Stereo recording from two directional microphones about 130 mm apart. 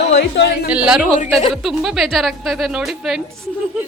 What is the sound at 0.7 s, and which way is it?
A man's voice, 5° right (ahead or behind).